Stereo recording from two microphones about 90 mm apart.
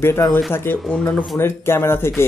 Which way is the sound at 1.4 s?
30° left (ahead or behind).